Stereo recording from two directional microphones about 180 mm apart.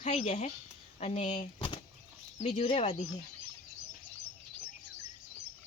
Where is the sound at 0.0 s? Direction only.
40° left (ahead or behind).